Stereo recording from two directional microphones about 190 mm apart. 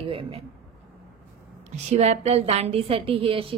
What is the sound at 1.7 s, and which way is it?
A woman's voice, 35° right (ahead or behind).